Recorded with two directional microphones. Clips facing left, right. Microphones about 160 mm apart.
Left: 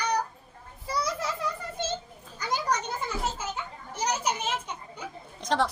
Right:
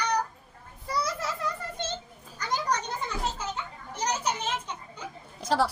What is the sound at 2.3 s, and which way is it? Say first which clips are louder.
Children playing: even; 10° left (ahead or behind).